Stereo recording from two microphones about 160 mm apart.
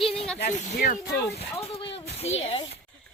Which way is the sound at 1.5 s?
35° left (ahead or behind).